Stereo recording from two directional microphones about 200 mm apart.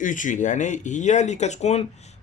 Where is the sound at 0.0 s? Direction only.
40° left (ahead or behind).